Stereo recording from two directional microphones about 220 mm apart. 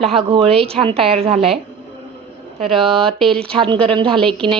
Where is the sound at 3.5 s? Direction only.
25° right (ahead or behind).